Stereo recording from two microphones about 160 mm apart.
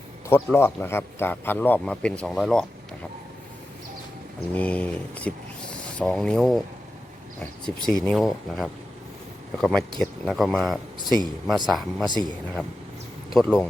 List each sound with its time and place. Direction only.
0.5 s speech: 15° left (ahead or behind)
4.5 s speech: 10° left (ahead or behind)
7.8 s speech: 5° left (ahead or behind)
12.0 s speech: 30° right (ahead or behind)
13.3 s speech: centre (ahead or behind)